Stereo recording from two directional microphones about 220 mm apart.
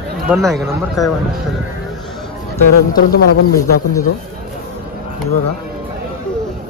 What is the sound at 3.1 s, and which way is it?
Speech, 45° left (ahead or behind).